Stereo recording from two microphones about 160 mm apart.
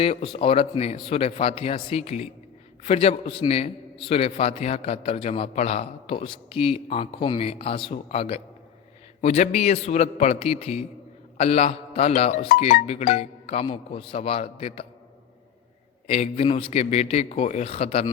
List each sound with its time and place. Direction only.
0.0 s a man's voice: 35° left (ahead or behind)
16.0 s a man's voice: 40° left (ahead or behind)